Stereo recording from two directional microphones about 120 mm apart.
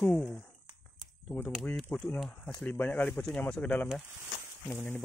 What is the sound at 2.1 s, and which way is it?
Speech, 5° left (ahead or behind).